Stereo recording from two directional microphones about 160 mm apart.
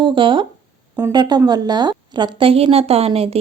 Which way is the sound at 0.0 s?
30° right (ahead or behind).